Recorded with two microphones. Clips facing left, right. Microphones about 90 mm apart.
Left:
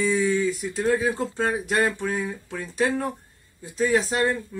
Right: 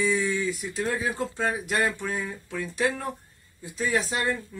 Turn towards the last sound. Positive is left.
turn(degrees=30)  # may be behind; listen again after turning